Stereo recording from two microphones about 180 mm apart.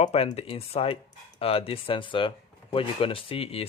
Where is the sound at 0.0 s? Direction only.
35° left (ahead or behind).